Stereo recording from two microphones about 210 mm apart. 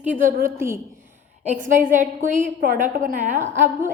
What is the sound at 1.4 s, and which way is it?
A woman's voice, 35° right (ahead or behind).